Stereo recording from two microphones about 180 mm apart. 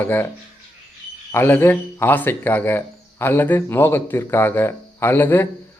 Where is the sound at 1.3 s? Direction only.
15° left (ahead or behind).